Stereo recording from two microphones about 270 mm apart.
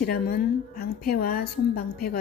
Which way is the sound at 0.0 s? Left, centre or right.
Left.